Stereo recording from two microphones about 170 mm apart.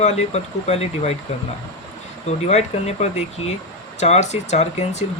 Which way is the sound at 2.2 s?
40° left (ahead or behind).